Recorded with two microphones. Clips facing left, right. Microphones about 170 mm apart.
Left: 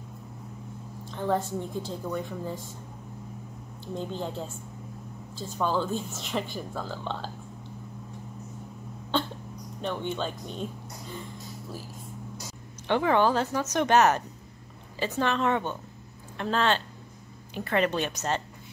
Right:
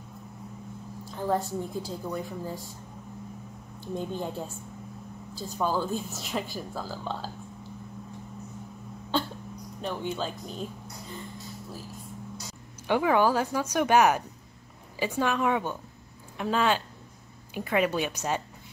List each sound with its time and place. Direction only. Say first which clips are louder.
1.1 s speech: even; 5° right (ahead or behind)
3.8 s speech: right 1 dB; 15° right (ahead or behind)
5.6 s speech: left 1 dB; 10° right (ahead or behind)
9.8 s speech: left 1 dB; 5° right (ahead or behind)
12.8 s speech: even; 10° right (ahead or behind)